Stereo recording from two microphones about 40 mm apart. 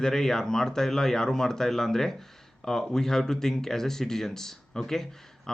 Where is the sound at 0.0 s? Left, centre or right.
Centre.